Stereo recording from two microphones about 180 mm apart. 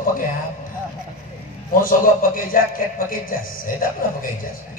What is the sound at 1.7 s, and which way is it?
A man's voice, 50° left (ahead or behind).